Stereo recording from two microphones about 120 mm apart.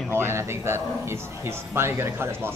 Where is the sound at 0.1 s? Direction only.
20° right (ahead or behind).